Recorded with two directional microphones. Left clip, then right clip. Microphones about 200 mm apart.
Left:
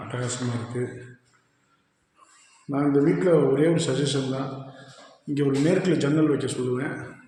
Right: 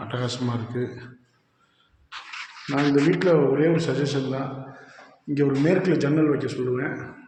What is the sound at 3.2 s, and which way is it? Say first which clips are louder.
A man's voice: even; 10° left (ahead or behind).